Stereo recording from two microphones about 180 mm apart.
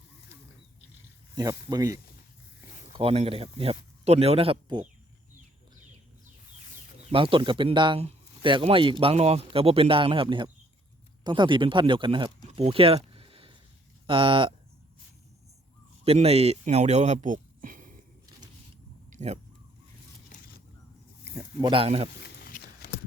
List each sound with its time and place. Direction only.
1.7 s speech: 20° right (ahead or behind)
3.0 s speech: 30° right (ahead or behind)
7.1 s speech: 30° right (ahead or behind)
12.5 s a sound: 35° right (ahead or behind)
14.1 s speech: 30° right (ahead or behind)
16.0 s speech: 35° right (ahead or behind)
19.1 s speech: 40° right (ahead or behind)
20.3 s vehicle: 40° left (ahead or behind)
21.2 s a sound: 15° right (ahead or behind)
21.7 s speech: 30° right (ahead or behind)
22.2 s a sound: 60° left (ahead or behind)